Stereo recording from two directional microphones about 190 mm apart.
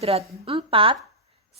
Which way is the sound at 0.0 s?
30° right (ahead or behind).